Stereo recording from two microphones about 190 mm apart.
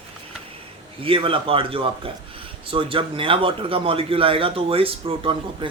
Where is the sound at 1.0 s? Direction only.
30° right (ahead or behind).